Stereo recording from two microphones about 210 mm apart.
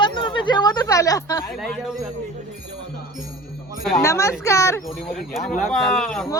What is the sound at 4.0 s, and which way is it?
Speech, 15° left (ahead or behind).